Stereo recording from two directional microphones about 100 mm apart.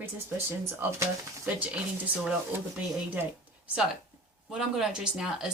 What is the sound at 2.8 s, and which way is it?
Speech, 15° right (ahead or behind).